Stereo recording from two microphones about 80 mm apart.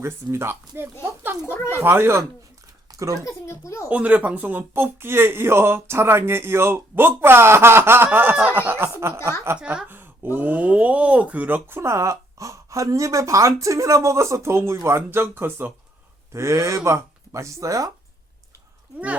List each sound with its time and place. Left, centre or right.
0.0 s speech: right
1.2 s a sound: right
1.7 s speech: right
3.2 s speech: left
3.8 s speech: centre; by 9.3 s right
9.6 s speech: centre
16.3 s speech: right